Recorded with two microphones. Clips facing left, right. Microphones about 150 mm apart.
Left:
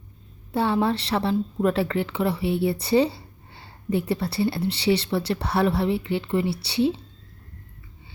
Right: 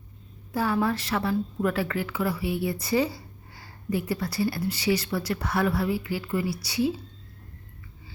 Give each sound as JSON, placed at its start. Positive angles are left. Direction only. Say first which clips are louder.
{"t": 0.5, "sound": "a woman's voice", "louder": "left 3 dB", "side_deg": 30}